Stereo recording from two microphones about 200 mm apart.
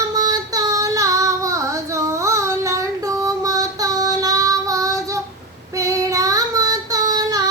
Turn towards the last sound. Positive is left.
turn(degrees=-20)  # may be behind; listen again after turning